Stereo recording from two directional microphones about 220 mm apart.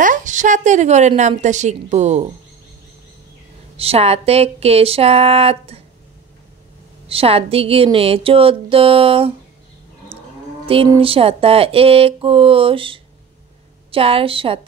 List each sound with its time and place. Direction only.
0.0 s a woman's voice: 35° right (ahead or behind)
3.7 s speech: 25° right (ahead or behind)
7.1 s speech: 25° right (ahead or behind)
11.0 s speech: 25° right (ahead or behind)